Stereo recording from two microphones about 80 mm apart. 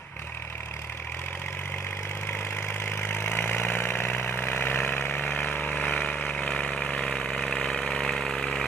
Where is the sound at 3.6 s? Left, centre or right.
Left.